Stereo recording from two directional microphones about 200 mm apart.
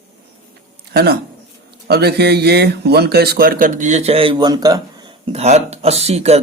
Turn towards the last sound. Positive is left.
turn(degrees=-30)  # may be behind; listen again after turning